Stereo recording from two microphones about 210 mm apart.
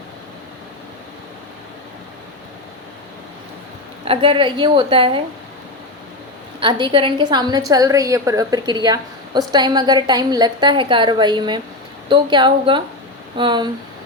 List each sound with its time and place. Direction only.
4.0 s a woman's voice: 25° right (ahead or behind)
6.6 s a woman's voice: 20° right (ahead or behind)